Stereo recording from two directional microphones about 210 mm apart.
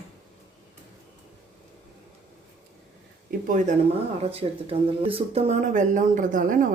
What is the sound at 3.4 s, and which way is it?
Speech, 40° right (ahead or behind).